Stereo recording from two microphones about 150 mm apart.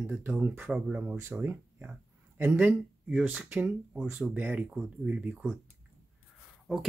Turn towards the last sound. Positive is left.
turn(degrees=0)  # may be behind; listen again after turning